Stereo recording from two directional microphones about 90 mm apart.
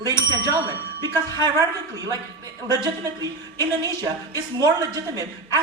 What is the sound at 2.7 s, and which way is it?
Speech, 45° right (ahead or behind).